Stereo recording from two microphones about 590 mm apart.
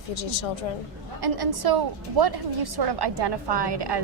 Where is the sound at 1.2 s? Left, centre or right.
Right.